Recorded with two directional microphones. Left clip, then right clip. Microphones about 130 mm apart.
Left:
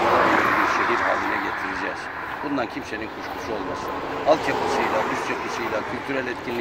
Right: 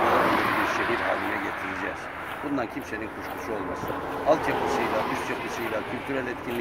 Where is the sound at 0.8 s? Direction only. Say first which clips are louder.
Left 5 dB; 50° right (ahead or behind).